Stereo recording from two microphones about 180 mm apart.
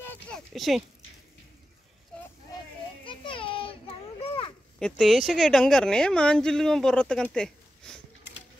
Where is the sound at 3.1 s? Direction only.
30° left (ahead or behind).